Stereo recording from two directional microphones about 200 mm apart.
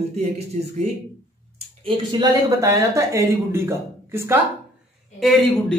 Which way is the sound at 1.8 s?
25° right (ahead or behind).